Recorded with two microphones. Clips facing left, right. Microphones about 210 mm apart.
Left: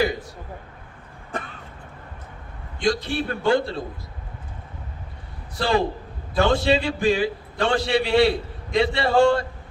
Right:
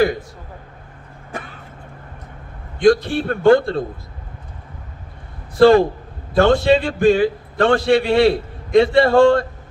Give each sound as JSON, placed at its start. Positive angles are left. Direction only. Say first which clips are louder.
{"t": 2.7, "sound": "a man's voice", "louder": "right 9 dB", "side_deg": -50}
{"t": 5.5, "sound": "a man's voice", "louder": "right 11 dB", "side_deg": -50}